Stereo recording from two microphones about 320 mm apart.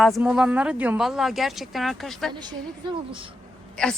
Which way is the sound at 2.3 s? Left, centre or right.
Centre.